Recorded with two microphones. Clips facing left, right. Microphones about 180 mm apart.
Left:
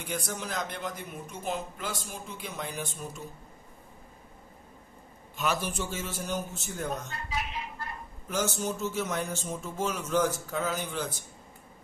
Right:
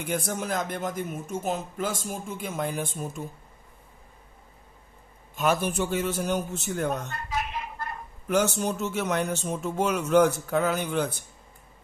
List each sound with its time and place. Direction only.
0.0 s a man's voice: 55° right (ahead or behind)
5.3 s a man's voice: 50° right (ahead or behind)